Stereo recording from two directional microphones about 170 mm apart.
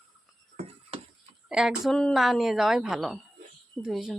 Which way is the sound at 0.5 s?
35° right (ahead or behind).